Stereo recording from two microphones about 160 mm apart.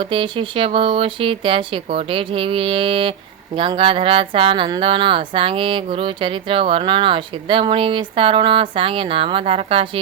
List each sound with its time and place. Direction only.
0.0 s speech: 30° right (ahead or behind)